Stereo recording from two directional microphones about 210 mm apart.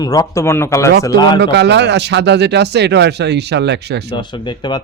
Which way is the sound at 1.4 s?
55° right (ahead or behind).